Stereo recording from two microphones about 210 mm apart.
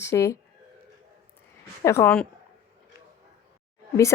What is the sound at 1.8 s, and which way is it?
Speech, 10° left (ahead or behind).